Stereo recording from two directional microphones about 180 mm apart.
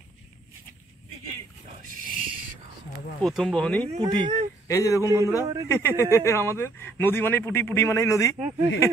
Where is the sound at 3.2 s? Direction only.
Centre (ahead or behind).